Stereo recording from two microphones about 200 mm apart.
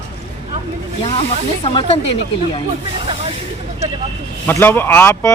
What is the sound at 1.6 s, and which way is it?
Speech, 30° left (ahead or behind).